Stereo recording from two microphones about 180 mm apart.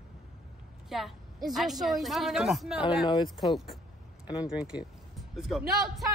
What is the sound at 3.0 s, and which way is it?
Speech, 25° left (ahead or behind).